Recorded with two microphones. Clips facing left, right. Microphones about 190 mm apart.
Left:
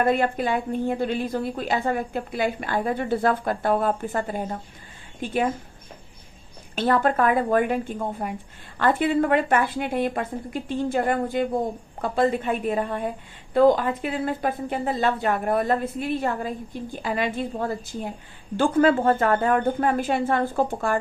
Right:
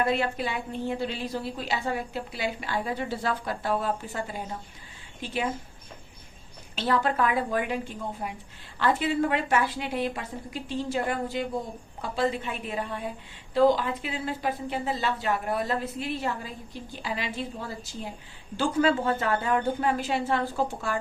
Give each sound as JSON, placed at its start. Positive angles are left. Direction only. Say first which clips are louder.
{"t": 0.0, "sound": "a woman's voice", "louder": "left 5 dB", "side_deg": 50}
{"t": 6.7, "sound": "a woman's voice", "louder": "left 5 dB", "side_deg": 50}